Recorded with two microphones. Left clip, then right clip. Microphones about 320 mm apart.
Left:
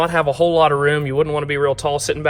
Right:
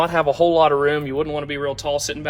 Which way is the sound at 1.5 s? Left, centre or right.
Centre.